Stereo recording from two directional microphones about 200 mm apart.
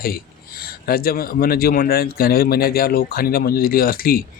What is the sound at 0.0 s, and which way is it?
Speech, 50° left (ahead or behind).